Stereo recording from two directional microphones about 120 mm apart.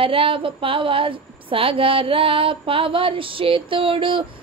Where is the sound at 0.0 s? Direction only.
50° right (ahead or behind).